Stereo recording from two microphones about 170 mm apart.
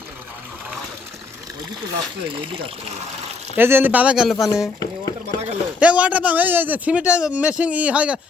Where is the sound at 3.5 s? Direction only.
10° right (ahead or behind).